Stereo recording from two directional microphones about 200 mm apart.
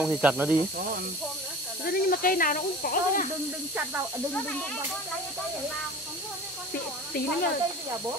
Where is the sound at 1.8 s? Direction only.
45° left (ahead or behind).